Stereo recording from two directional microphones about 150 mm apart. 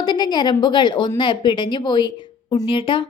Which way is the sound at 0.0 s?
30° left (ahead or behind).